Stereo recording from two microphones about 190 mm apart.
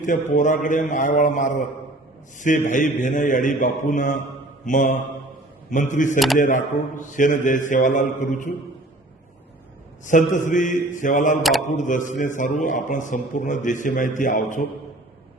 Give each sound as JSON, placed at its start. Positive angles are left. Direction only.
{"t": 0.0, "sound": "a man's voice", "side_deg": 40}
{"t": 6.1, "sound": "speech", "side_deg": 0}
{"t": 6.4, "sound": "a man's voice", "side_deg": 45}
{"t": 10.1, "sound": "a man's voice", "side_deg": 40}